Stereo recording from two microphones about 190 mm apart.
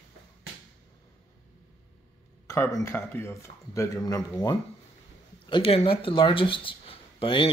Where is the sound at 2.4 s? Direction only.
15° left (ahead or behind).